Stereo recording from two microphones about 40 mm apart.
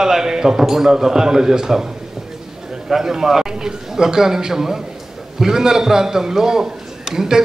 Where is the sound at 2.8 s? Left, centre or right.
Centre.